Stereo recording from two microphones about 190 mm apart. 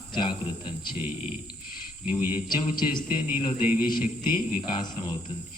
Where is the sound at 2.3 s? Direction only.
25° left (ahead or behind).